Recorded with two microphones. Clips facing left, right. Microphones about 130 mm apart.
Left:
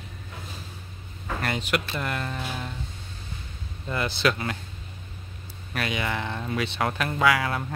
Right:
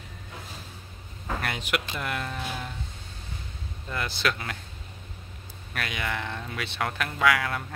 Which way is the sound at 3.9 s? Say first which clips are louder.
Left 4 dB; centre (ahead or behind).